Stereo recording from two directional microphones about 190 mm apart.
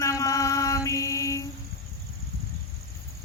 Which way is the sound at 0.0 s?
15° left (ahead or behind).